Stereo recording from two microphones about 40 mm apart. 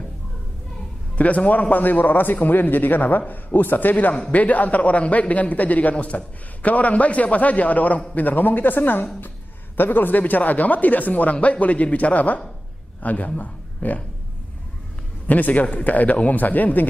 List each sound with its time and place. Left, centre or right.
1.1 s a man's voice: left
4.1 s a man's voice: left
4.4 s a man's voice: left
15.2 s a man's voice: left